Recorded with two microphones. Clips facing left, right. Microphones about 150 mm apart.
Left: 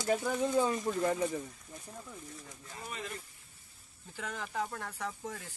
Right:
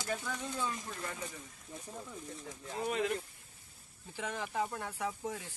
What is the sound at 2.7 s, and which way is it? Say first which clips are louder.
Speech: right 9 dB; 65° right (ahead or behind).